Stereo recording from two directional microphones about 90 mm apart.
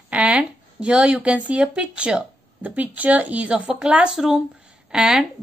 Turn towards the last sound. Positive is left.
turn(degrees=-5)  # may be behind; listen again after turning